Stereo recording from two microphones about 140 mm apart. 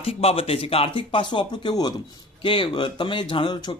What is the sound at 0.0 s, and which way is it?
Speech, 45° left (ahead or behind).